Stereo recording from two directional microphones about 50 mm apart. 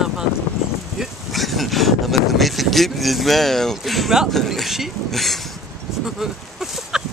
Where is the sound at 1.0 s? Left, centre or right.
Centre.